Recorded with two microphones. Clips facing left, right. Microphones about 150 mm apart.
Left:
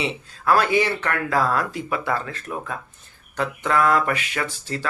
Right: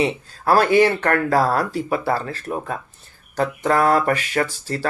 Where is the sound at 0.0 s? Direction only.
40° right (ahead or behind).